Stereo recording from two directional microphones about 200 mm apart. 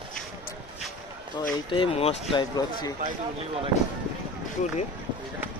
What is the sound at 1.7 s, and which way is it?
Speech, 25° left (ahead or behind).